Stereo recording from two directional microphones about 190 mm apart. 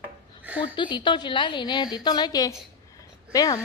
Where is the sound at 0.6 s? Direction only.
25° left (ahead or behind).